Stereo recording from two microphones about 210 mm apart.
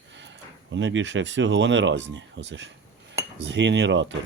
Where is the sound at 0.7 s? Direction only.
60° right (ahead or behind).